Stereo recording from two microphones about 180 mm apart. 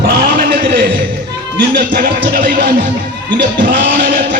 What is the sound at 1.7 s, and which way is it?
Music, 60° right (ahead or behind).